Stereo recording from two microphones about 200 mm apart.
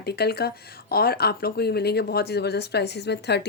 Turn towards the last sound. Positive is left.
turn(degrees=55)  # may be behind; listen again after turning